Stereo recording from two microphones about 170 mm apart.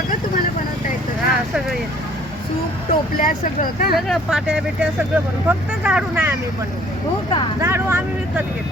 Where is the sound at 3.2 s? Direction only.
55° left (ahead or behind).